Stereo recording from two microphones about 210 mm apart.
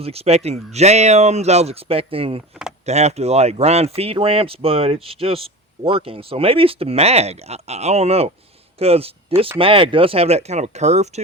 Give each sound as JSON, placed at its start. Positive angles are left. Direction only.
{"t": 0.0, "sound": "speech", "side_deg": -30}